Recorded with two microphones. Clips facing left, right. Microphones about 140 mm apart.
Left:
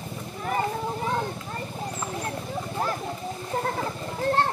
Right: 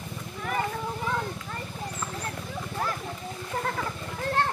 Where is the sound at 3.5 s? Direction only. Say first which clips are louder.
Left 2 dB; 35° left (ahead or behind).